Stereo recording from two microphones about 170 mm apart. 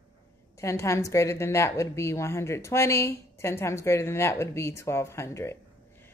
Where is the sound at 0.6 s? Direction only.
15° left (ahead or behind).